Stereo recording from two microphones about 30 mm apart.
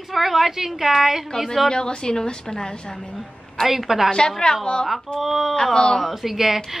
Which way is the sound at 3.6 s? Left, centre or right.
Centre.